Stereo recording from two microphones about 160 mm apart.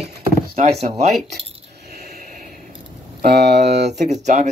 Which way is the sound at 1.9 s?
60° right (ahead or behind).